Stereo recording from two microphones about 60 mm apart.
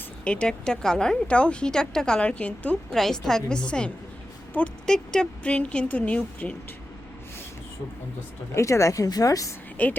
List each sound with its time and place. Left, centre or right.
0.3 s a woman's voice: centre
2.9 s a woman's voice: centre
4.5 s speech: left
4.9 s speech: centre
8.5 s a woman's voice: left
9.8 s speech: left